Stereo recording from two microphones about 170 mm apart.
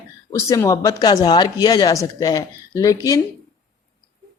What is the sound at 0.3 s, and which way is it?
Speech, 20° left (ahead or behind).